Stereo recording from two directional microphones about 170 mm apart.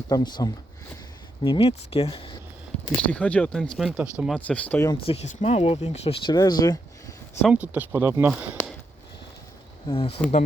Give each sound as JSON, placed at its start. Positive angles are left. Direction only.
{"t": 0.1, "sound": "speech", "side_deg": 25}
{"t": 2.9, "sound": "speech", "side_deg": 5}
{"t": 4.4, "sound": "speech", "side_deg": 10}
{"t": 5.0, "sound": "speech", "side_deg": 40}
{"t": 6.3, "sound": "speech", "side_deg": 25}
{"t": 7.4, "sound": "speech", "side_deg": -10}
{"t": 9.8, "sound": "speech", "side_deg": 35}